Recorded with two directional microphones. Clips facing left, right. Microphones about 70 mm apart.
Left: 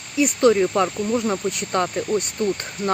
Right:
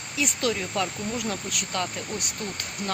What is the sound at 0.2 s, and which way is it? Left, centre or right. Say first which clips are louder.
Speech: left 11 dB; left.